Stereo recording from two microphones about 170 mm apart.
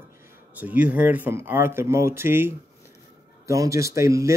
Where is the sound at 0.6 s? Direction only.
10° right (ahead or behind).